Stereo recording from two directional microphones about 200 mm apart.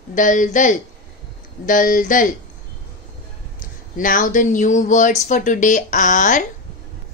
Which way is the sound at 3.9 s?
40° left (ahead or behind).